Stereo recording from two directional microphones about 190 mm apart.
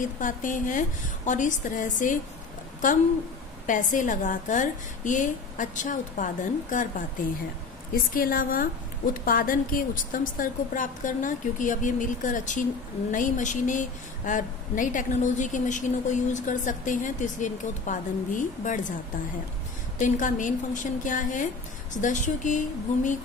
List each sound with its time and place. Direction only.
0.0 s a woman's voice: 45° left (ahead or behind)
3.6 s a woman's voice: 40° left (ahead or behind)
7.9 s a woman's voice: 50° left (ahead or behind)
20.0 s a woman's voice: 40° left (ahead or behind)